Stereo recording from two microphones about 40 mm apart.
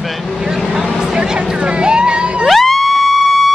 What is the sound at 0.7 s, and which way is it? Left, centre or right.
Speech, centre.